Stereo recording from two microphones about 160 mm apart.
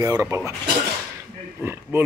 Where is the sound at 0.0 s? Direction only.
20° right (ahead or behind).